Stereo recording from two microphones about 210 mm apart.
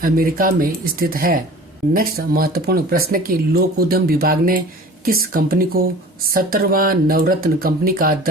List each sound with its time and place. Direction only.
0.0 s speech: 45° right (ahead or behind)